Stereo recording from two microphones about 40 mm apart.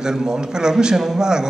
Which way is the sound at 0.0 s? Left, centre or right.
Centre.